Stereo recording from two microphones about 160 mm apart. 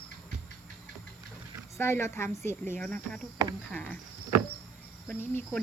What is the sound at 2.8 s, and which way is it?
Speech, 5° left (ahead or behind).